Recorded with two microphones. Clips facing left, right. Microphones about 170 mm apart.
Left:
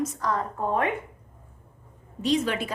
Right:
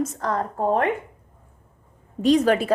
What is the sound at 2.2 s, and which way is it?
Speech, 40° right (ahead or behind).